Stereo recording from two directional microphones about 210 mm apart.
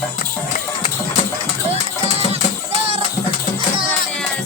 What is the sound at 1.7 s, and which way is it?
Music, 30° right (ahead or behind).